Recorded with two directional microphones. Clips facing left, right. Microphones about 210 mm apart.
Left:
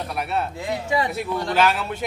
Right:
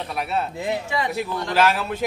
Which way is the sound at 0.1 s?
Centre (ahead or behind).